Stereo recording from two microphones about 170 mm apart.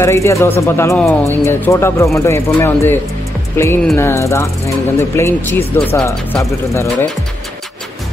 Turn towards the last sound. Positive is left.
turn(degrees=15)  # may be behind; listen again after turning